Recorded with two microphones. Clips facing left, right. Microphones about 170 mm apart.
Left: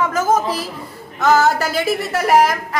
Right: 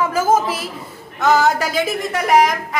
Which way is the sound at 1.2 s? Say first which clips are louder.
Left 1 dB; centre (ahead or behind).